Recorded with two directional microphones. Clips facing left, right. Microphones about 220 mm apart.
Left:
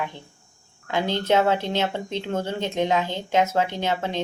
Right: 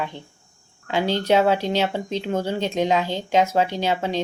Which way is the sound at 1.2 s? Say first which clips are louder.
Right 2 dB; 15° right (ahead or behind).